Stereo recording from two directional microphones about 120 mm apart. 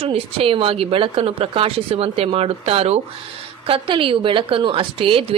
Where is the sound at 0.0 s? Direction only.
55° right (ahead or behind).